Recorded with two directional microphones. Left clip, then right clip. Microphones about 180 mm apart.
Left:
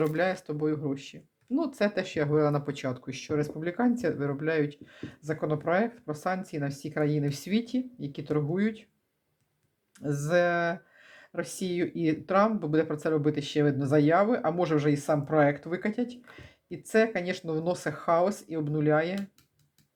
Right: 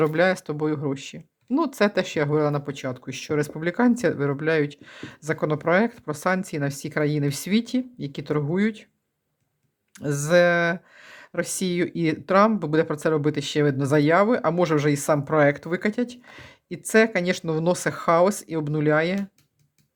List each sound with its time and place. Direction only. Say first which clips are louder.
0.0 s speech: right 7 dB; 35° right (ahead or behind)
10.0 s speech: right 7 dB; 30° right (ahead or behind)